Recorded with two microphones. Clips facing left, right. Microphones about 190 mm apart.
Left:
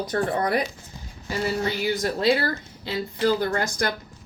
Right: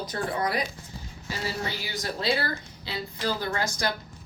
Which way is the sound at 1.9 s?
50° left (ahead or behind).